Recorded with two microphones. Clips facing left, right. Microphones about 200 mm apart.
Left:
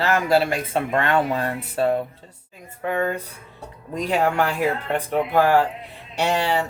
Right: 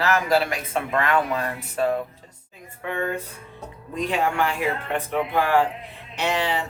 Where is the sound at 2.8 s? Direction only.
40° left (ahead or behind).